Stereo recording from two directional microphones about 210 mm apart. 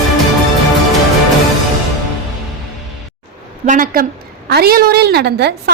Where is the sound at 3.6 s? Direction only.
40° right (ahead or behind).